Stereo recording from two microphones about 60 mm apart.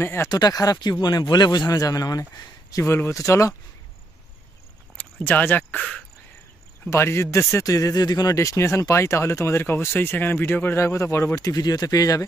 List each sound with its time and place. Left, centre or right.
0.0 s speech: left
0.3 s speech: left
2.8 s speech: left
3.2 s speech: left
4.9 s a sound: left
5.8 s speech: centre
6.9 s speech: left
7.6 s speech: left
8.5 s speech: left
9.6 s speech: left
10.8 s speech: left
11.3 s speech: left